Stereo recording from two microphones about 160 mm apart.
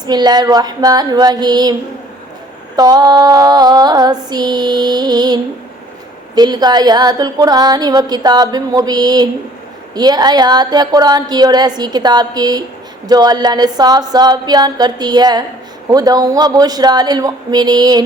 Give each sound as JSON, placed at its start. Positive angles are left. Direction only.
{"t": 0.0, "sound": "a woman's voice", "side_deg": -25}
{"t": 2.7, "sound": "a woman's voice", "side_deg": -25}